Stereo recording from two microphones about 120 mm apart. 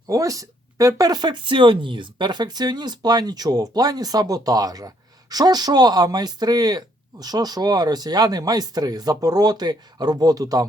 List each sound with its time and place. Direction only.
0.1 s speech: 30° right (ahead or behind)